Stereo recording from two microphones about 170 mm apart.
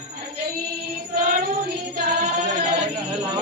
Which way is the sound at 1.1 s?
55° right (ahead or behind).